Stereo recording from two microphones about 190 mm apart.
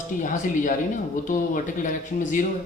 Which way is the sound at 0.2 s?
40° left (ahead or behind).